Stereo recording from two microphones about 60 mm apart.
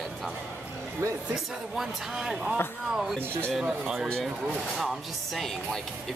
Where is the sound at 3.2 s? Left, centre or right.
Right.